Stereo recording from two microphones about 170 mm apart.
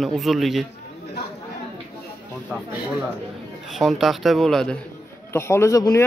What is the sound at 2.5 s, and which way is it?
Speech, 10° right (ahead or behind).